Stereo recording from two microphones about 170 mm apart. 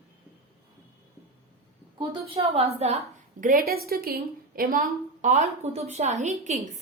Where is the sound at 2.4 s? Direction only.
30° right (ahead or behind).